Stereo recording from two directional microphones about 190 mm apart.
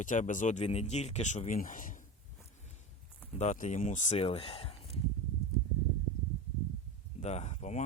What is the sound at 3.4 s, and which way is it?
Speech, 40° left (ahead or behind).